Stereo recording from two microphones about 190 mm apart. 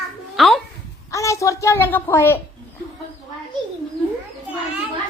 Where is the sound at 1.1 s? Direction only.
15° left (ahead or behind).